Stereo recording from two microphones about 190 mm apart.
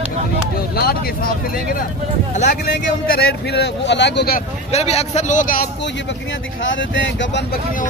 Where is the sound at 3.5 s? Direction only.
65° left (ahead or behind).